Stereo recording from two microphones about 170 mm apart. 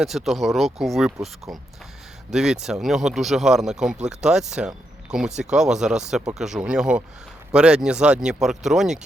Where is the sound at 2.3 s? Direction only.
5° right (ahead or behind).